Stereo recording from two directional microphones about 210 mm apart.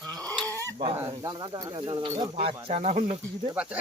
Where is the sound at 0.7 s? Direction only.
25° right (ahead or behind).